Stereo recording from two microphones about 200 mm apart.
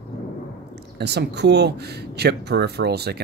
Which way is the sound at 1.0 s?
55° right (ahead or behind).